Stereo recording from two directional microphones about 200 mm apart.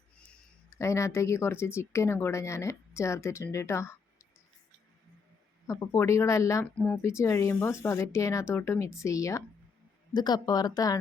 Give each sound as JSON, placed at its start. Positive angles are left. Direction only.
{"t": 0.7, "sound": "speech", "side_deg": 15}
{"t": 5.6, "sound": "a woman's voice", "side_deg": 15}